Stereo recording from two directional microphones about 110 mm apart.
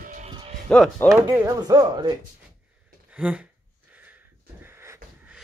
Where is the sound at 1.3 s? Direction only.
35° right (ahead or behind).